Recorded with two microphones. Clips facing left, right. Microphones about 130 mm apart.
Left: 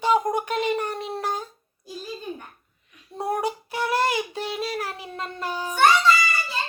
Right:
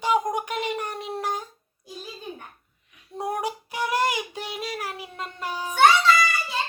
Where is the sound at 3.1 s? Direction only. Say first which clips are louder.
Left 2 dB; 15° right (ahead or behind).